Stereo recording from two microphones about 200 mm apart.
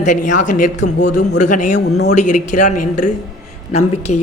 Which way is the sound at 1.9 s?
55° left (ahead or behind).